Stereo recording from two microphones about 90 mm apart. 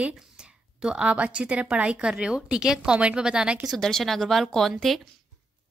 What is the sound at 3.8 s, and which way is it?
Speech, 5° left (ahead or behind).